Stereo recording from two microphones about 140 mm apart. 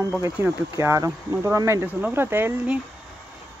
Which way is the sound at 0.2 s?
20° right (ahead or behind).